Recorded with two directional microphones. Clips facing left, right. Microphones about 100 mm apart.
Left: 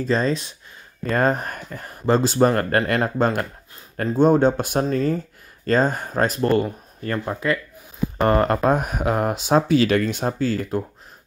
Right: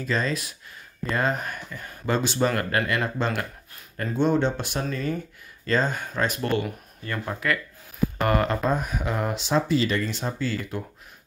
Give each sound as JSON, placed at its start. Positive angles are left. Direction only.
{"t": 0.0, "sound": "speech", "side_deg": 35}
{"t": 1.1, "sound": "speech", "side_deg": 40}
{"t": 7.2, "sound": "speech", "side_deg": 25}
{"t": 8.5, "sound": "speech", "side_deg": 55}